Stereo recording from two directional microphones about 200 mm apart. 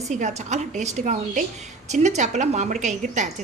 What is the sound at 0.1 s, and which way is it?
A woman's voice, 35° right (ahead or behind).